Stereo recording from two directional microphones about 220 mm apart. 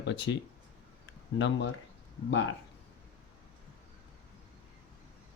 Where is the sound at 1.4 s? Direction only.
55° left (ahead or behind).